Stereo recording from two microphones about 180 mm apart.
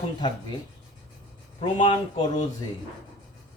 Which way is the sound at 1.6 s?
30° left (ahead or behind).